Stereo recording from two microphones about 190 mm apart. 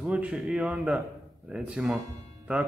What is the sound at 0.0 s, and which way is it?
Speech, 5° right (ahead or behind).